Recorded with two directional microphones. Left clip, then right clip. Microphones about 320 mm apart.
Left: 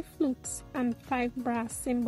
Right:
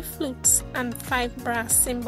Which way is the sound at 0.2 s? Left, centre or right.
Right.